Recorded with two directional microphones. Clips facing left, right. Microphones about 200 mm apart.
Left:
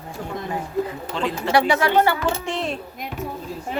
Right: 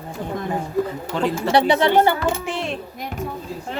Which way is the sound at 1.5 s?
25° right (ahead or behind).